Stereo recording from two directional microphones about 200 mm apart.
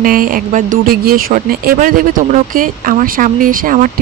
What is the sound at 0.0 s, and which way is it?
Speech, 45° right (ahead or behind).